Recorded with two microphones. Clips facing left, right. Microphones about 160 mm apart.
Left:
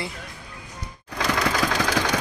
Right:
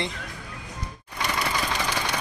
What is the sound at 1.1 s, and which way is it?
Engine, 90° left.